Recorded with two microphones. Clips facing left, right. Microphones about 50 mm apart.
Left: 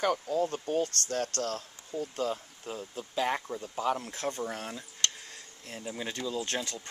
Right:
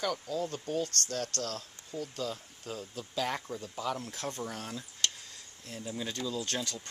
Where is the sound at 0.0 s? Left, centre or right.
Left; by 3.7 s centre.